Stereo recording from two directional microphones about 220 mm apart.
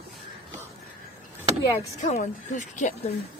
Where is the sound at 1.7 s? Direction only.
30° left (ahead or behind).